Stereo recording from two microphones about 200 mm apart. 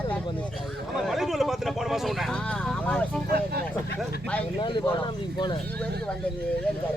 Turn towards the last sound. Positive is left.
turn(degrees=20)  # may be behind; listen again after turning